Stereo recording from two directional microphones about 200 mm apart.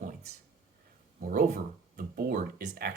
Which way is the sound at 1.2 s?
40° right (ahead or behind).